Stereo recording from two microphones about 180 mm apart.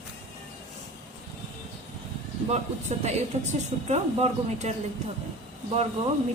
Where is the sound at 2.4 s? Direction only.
40° right (ahead or behind).